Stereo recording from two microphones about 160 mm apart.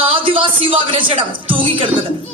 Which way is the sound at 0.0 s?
35° right (ahead or behind).